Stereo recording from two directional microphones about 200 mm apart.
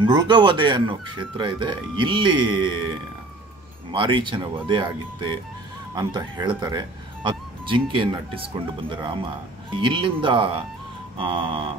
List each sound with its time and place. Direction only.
0.0 s speech: 20° right (ahead or behind)
3.9 s speech: 25° right (ahead or behind)
5.9 s speech: 20° right (ahead or behind)